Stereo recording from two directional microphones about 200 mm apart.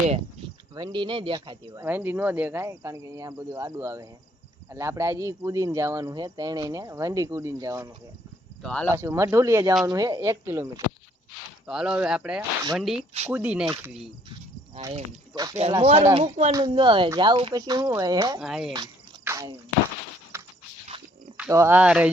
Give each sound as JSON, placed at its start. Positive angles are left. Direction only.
{"t": 0.8, "sound": "speech", "side_deg": -20}
{"t": 1.8, "sound": "speech", "side_deg": -10}
{"t": 8.6, "sound": "speech", "side_deg": 5}
{"t": 8.9, "sound": "speech", "side_deg": -15}
{"t": 11.6, "sound": "speech", "side_deg": -5}
{"t": 13.7, "sound": "speech", "side_deg": -20}
{"t": 16.5, "sound": "speech", "side_deg": -15}
{"t": 18.3, "sound": "speech", "side_deg": 0}
{"t": 19.2, "sound": "speech", "side_deg": -15}
{"t": 20.3, "sound": "a sound", "side_deg": -15}
{"t": 21.5, "sound": "speech", "side_deg": -10}